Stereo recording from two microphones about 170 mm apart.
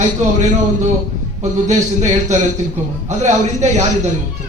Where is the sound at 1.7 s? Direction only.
45° right (ahead or behind).